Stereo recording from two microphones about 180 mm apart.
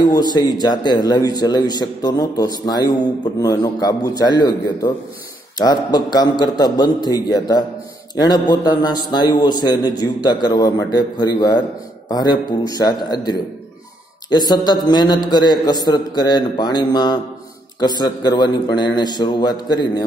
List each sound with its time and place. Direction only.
0.0 s a man's voice: 20° left (ahead or behind)